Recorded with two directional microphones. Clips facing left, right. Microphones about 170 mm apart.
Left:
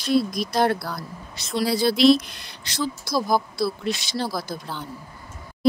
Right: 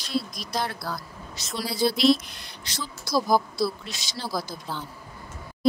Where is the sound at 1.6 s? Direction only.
70° left (ahead or behind).